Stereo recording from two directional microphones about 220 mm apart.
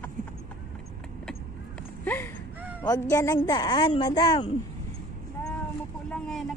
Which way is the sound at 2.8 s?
15° left (ahead or behind).